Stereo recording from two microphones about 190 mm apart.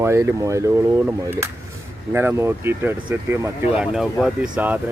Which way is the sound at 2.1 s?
10° right (ahead or behind).